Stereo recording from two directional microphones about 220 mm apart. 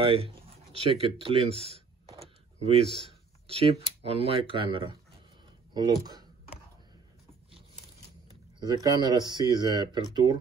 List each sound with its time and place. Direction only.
0.0 s speech: 25° right (ahead or behind)
2.1 s a sound: 25° right (ahead or behind)
3.4 s speech: 25° right (ahead or behind)
5.9 s speech: 15° right (ahead or behind)
8.5 s speech: 15° right (ahead or behind)